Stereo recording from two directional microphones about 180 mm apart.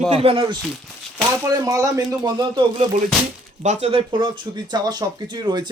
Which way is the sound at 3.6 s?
30° right (ahead or behind).